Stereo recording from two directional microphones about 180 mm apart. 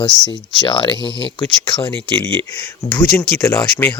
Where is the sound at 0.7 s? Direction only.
25° left (ahead or behind).